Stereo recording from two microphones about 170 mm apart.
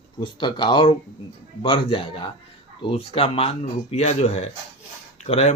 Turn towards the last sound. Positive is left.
turn(degrees=40)  # may be behind; listen again after turning